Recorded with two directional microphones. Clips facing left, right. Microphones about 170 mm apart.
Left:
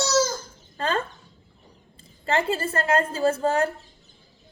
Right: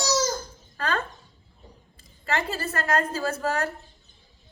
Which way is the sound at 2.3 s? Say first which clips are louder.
Left 4 dB; 25° left (ahead or behind).